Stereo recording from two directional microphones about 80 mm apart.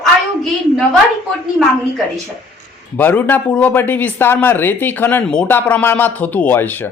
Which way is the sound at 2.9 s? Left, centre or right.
Left.